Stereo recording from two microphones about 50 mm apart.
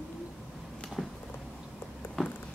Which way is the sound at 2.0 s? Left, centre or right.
Left.